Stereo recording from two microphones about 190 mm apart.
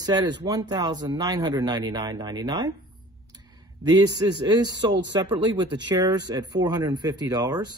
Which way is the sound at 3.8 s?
20° right (ahead or behind).